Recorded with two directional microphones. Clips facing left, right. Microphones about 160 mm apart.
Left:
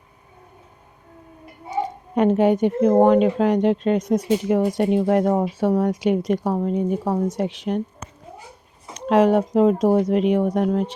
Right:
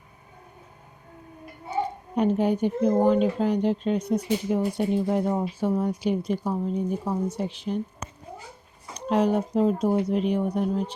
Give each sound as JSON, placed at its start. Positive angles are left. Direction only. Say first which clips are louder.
{"t": 1.8, "sound": "speech", "louder": "left 5 dB", "side_deg": 85}
{"t": 9.0, "sound": "speech", "louder": "left 6 dB", "side_deg": 80}